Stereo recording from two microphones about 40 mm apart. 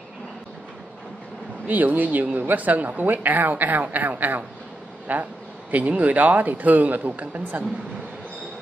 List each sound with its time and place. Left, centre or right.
1.7 s speech: right